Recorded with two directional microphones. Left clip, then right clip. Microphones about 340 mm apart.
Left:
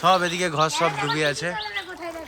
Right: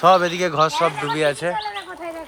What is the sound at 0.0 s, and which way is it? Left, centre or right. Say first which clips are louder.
Speech: right 5 dB; centre.